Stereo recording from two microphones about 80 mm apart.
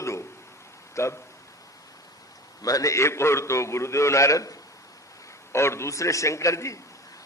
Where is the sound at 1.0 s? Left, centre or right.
Left.